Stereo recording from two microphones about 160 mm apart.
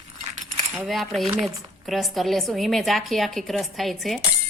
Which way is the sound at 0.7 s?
Centre (ahead or behind).